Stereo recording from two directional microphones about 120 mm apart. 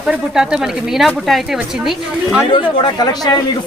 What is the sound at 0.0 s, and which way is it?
A woman's voice, 5° right (ahead or behind).